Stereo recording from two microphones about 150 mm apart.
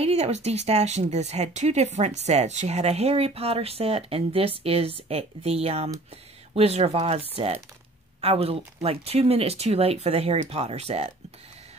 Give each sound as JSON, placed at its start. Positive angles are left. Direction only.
{"t": 0.0, "sound": "speech", "side_deg": -45}